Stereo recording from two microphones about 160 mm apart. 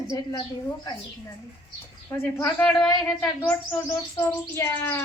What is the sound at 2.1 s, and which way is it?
Bird, 15° left (ahead or behind).